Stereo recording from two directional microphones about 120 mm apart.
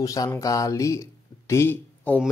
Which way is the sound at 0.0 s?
30° left (ahead or behind).